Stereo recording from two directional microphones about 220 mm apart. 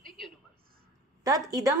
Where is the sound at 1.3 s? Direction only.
15° right (ahead or behind).